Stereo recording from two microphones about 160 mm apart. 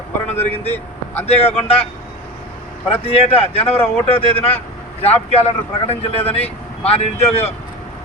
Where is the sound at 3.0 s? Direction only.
35° left (ahead or behind).